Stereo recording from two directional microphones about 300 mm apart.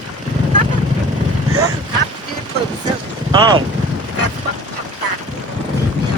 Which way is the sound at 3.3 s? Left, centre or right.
Centre.